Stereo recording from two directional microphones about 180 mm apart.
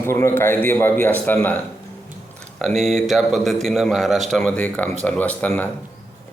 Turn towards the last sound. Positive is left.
turn(degrees=10)  # may be behind; listen again after turning